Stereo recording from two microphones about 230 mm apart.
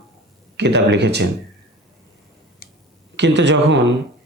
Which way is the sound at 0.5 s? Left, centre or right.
Right.